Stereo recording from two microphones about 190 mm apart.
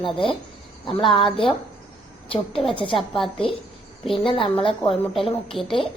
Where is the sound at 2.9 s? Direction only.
Centre (ahead or behind).